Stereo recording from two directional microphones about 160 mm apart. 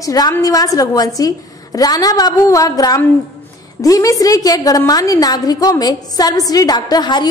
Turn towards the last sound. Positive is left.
turn(degrees=25)  # may be behind; listen again after turning